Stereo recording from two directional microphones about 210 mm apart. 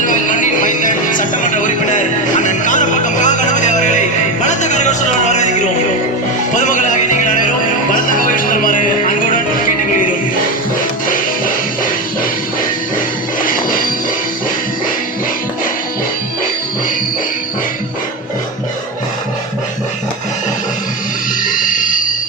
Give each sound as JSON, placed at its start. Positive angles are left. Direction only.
{"t": 0.0, "sound": "music", "side_deg": 40}
{"t": 4.4, "sound": "a sound", "side_deg": 35}
{"t": 6.5, "sound": "music", "side_deg": 35}
{"t": 8.4, "sound": "music", "side_deg": 40}